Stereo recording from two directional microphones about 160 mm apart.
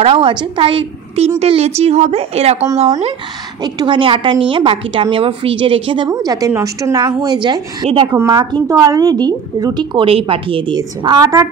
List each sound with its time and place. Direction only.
0.0 s a woman's voice: 35° right (ahead or behind)
3.6 s a woman's voice: 30° right (ahead or behind)